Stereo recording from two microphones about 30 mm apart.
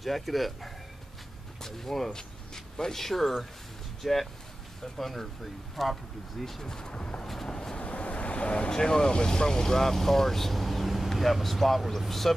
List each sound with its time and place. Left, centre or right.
0.0 s speech: centre
6.6 s speech: centre
6.9 s a sound: left
7.4 s vehicle: left
7.8 s waves: left
8.7 s speech: left; by 11.1 s centre
11.1 s vehicle: centre
11.6 s speech: centre